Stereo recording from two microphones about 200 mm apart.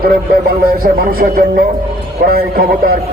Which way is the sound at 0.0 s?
50° right (ahead or behind).